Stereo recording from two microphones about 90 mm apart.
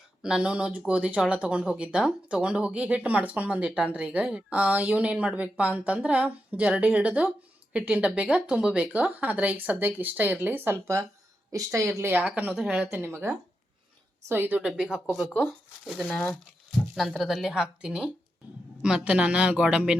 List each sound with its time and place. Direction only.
0.2 s a woman's voice: 10° right (ahead or behind)
12.9 s a woman's voice: 25° right (ahead or behind)
14.6 s speech: 10° right (ahead or behind)
15.3 s speech: 20° left (ahead or behind)
16.9 s a woman's voice: 5° right (ahead or behind)